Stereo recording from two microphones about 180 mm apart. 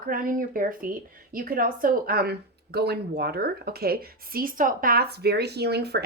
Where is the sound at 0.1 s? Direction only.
50° right (ahead or behind).